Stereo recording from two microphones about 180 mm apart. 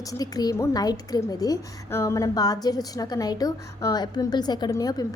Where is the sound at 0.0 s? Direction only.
20° left (ahead or behind).